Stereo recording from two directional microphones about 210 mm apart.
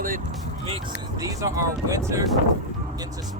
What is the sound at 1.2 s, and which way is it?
Speech, 15° right (ahead or behind).